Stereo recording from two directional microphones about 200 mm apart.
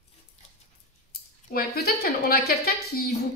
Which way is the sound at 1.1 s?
50° left (ahead or behind).